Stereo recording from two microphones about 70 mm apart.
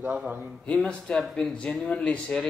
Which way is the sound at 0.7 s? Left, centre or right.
Centre.